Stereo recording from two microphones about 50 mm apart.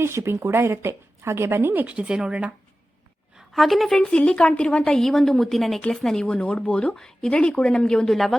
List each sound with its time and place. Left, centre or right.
0.0 s a woman's voice: right
0.5 s a woman's voice: right
1.7 s speech: right
2.0 s speech: centre
3.5 s a woman's voice: centre
4.1 s a woman's voice: centre
8.1 s a woman's voice: centre